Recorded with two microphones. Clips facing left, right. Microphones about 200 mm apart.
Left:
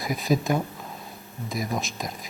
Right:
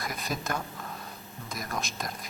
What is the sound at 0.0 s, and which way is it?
Speech, centre (ahead or behind).